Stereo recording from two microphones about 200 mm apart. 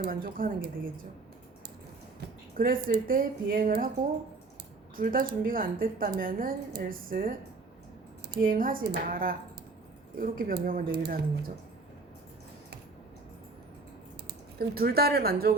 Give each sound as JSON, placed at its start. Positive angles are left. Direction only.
{"t": 0.0, "sound": "a woman's voice", "side_deg": -45}
{"t": 2.6, "sound": "a woman's voice", "side_deg": -50}
{"t": 4.9, "sound": "a woman's voice", "side_deg": -45}
{"t": 14.6, "sound": "a woman's voice", "side_deg": -50}